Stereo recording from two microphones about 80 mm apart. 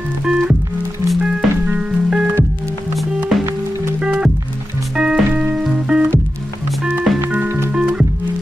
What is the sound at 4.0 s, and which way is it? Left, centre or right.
Music, centre.